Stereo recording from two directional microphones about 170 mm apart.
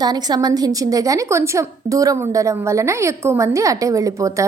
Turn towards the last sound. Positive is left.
turn(degrees=-20)  # may be behind; listen again after turning